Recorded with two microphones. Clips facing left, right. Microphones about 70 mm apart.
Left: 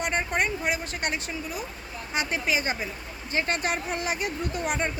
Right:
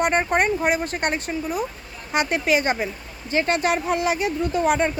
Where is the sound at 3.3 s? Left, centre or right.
Right.